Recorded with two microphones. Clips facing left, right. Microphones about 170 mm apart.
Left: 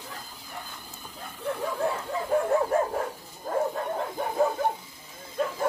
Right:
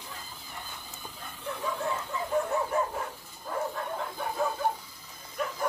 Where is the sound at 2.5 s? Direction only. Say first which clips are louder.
Left 5 dB; 50° left (ahead or behind).